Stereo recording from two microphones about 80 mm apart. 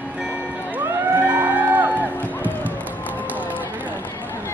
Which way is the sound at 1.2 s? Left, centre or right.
Right.